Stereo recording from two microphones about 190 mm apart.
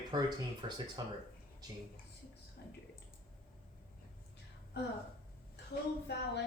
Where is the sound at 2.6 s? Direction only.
60° left (ahead or behind).